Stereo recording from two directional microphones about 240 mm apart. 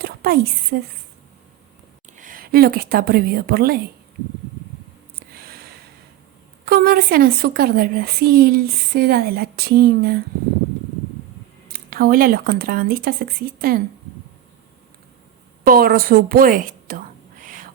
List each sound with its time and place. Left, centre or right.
0.0 s a woman's voice: right
2.1 s a woman's voice: right
5.3 s a sound: right
6.7 s a woman's voice: right
11.7 s a woman's voice: right
15.6 s a woman's voice: right
17.4 s owl: right